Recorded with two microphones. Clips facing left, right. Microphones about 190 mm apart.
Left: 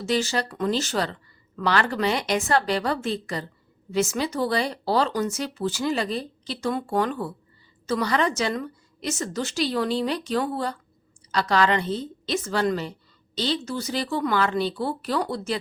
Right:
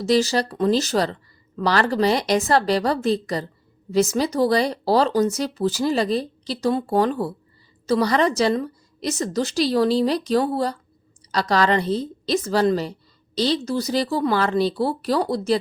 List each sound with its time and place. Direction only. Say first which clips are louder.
0.0 s a woman's voice: right 6 dB; 35° right (ahead or behind)